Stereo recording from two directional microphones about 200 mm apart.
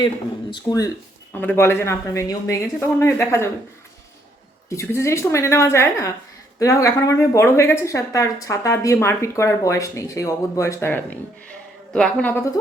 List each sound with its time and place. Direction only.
0.5 s speech: 15° left (ahead or behind)
4.7 s a woman's voice: 15° left (ahead or behind)